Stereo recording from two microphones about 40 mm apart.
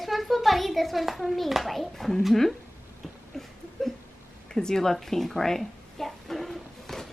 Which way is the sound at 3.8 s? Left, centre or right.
Centre.